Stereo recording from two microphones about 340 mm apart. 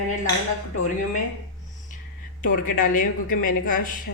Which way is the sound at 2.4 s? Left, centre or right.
Left.